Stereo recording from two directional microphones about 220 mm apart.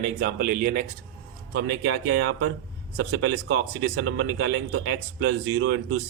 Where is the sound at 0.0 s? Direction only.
40° right (ahead or behind).